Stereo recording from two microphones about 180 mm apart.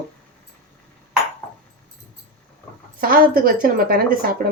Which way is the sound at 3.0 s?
55° right (ahead or behind).